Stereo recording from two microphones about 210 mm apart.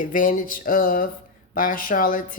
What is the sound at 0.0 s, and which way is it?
Speech, 40° left (ahead or behind).